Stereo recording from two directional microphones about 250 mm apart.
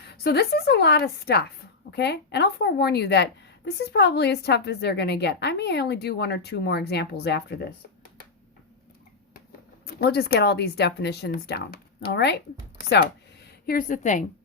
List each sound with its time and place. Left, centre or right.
0.1 s a woman's voice: left
9.8 s a woman's voice: left